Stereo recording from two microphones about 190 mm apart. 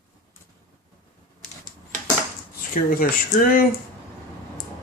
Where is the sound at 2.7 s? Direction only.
45° left (ahead or behind).